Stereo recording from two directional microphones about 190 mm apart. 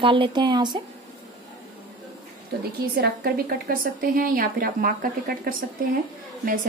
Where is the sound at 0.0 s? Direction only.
25° right (ahead or behind).